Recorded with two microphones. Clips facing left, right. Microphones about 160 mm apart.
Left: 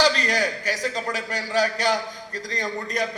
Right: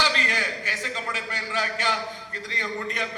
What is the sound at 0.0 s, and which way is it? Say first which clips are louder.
A man's voice: left 6 dB; 40° left (ahead or behind).